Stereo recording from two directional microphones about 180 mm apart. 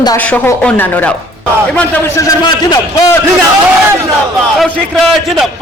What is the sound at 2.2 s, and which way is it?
Speech, 20° left (ahead or behind).